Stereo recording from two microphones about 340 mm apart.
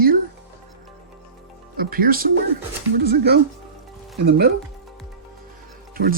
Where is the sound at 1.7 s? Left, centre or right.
Right.